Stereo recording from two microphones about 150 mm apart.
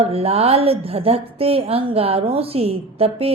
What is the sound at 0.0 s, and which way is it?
A woman's voice, 40° right (ahead or behind).